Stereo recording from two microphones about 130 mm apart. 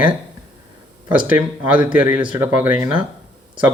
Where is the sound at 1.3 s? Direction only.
10° right (ahead or behind).